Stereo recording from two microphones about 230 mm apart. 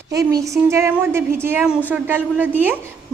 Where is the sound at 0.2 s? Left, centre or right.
Centre.